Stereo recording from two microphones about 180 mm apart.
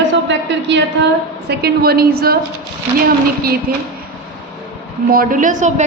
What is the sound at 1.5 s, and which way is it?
Speech, 60° right (ahead or behind).